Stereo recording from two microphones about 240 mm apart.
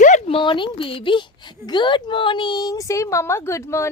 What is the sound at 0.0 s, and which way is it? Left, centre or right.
A woman's voice, left.